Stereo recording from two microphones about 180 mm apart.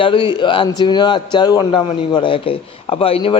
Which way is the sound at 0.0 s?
25° left (ahead or behind).